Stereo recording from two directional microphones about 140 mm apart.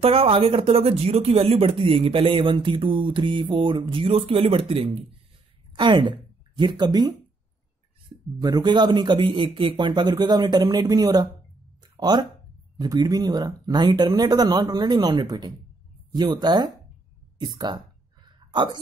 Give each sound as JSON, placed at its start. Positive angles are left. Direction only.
{"t": 0.0, "sound": "a woman's voice", "side_deg": -40}
{"t": 8.4, "sound": "speech", "side_deg": -25}